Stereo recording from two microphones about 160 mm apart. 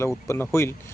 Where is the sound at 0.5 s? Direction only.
15° left (ahead or behind).